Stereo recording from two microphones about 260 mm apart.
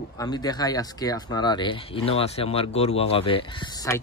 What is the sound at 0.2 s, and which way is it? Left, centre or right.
Speech, centre.